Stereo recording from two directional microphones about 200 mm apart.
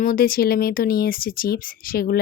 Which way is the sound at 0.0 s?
45° left (ahead or behind).